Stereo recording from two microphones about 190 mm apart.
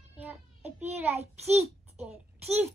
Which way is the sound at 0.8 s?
35° right (ahead or behind).